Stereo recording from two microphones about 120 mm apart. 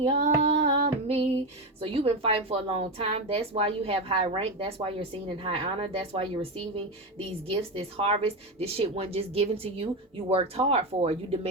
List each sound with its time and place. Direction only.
0.2 s female singing: 60° right (ahead or behind)
1.8 s a woman's voice: 50° right (ahead or behind)